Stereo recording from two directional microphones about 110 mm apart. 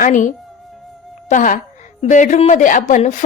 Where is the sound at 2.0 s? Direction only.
90° left.